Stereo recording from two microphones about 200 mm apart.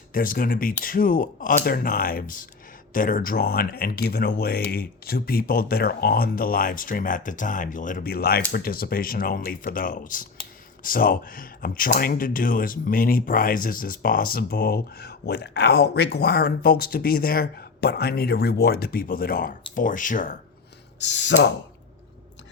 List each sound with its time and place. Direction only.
0.1 s speech: 45° left (ahead or behind)
21.0 s speech: 60° left (ahead or behind)